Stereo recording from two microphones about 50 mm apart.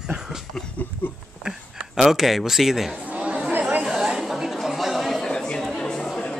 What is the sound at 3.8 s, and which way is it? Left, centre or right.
Chatter, centre.